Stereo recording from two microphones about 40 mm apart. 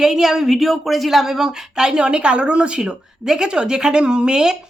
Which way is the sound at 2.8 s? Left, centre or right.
Centre.